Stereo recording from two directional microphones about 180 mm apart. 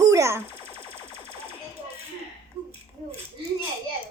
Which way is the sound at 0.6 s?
30° left (ahead or behind).